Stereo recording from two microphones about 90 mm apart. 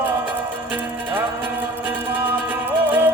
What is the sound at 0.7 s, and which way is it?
Music, 25° right (ahead or behind).